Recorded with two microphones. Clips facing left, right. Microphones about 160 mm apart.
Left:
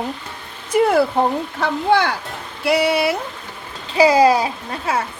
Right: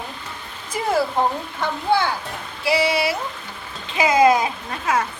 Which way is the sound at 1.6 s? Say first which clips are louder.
Left 3 dB; 80° left.